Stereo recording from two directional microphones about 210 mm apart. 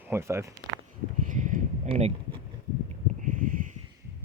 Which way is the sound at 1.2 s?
35° right (ahead or behind).